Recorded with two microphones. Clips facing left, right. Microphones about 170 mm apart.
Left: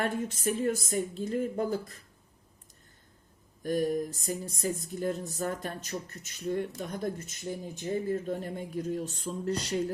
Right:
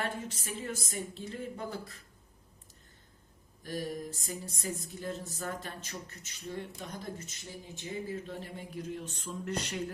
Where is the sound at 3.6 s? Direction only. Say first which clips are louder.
Left 9 dB; 50° left (ahead or behind).